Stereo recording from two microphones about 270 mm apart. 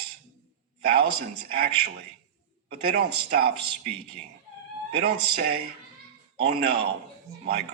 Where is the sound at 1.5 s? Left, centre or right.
Right.